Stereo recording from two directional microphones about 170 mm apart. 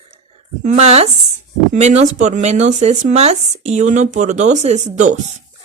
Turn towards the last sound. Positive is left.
turn(degrees=-45)  # may be behind; listen again after turning